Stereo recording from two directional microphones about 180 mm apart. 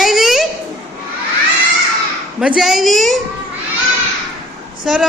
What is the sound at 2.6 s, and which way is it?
Speech, centre (ahead or behind).